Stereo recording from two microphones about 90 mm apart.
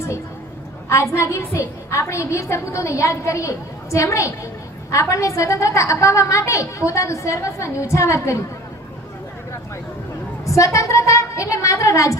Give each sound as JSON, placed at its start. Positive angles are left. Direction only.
{"t": 1.1, "sound": "a woman's voice", "side_deg": 35}
{"t": 10.4, "sound": "a woman's voice", "side_deg": 35}